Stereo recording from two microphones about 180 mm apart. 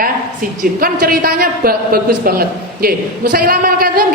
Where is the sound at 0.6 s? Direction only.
55° right (ahead or behind).